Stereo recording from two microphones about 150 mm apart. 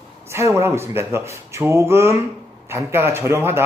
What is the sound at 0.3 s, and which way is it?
Speech, 15° right (ahead or behind).